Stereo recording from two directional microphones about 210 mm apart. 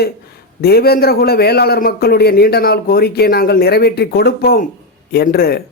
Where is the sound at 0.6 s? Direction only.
50° left (ahead or behind).